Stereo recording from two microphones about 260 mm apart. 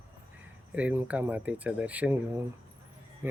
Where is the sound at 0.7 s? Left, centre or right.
Centre.